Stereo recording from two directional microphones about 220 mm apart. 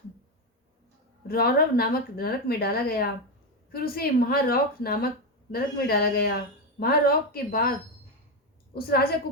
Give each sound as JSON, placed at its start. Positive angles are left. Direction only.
{"t": 1.3, "sound": "speech", "side_deg": 45}
{"t": 8.7, "sound": "a woman's voice", "side_deg": 45}